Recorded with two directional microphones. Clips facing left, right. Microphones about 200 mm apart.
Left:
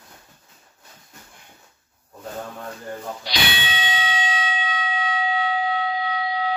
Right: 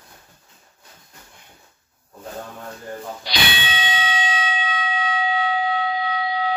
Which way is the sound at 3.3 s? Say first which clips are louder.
Right 1 dB; 75° right (ahead or behind).